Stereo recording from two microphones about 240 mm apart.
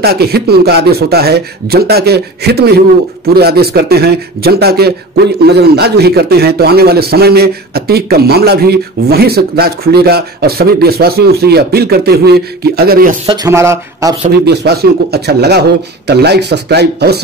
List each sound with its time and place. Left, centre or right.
0.0 s a man's voice: right
13.3 s speech: centre
14.2 s speech: right